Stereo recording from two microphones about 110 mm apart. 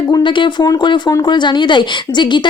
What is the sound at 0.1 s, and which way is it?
A woman's voice, 45° left (ahead or behind).